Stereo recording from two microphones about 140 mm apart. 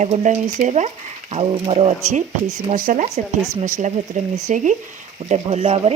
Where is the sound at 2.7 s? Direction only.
70° right (ahead or behind).